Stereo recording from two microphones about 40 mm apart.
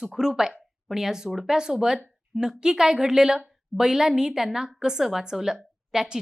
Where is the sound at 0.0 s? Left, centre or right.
Centre.